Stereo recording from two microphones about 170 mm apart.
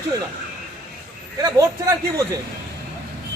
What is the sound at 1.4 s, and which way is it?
Speech, 20° right (ahead or behind).